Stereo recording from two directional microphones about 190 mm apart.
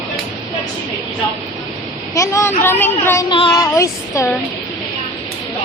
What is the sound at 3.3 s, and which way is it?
Speech, 25° left (ahead or behind).